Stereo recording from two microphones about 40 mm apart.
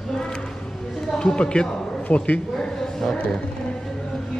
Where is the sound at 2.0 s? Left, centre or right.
Left.